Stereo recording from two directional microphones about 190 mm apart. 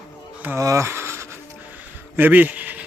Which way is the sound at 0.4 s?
15° right (ahead or behind).